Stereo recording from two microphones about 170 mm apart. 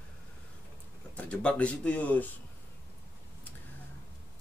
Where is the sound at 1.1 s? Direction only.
5° left (ahead or behind).